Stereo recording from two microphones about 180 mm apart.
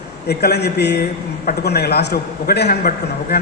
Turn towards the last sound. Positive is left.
turn(degrees=60)  # may be behind; listen again after turning